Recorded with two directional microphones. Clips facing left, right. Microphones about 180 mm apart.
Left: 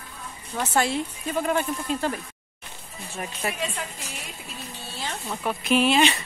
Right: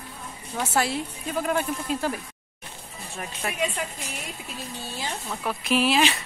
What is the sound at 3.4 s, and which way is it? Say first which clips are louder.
Speech: left 2 dB; 5° left (ahead or behind).